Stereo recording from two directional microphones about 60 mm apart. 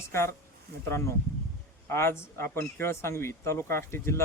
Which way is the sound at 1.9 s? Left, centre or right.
Left.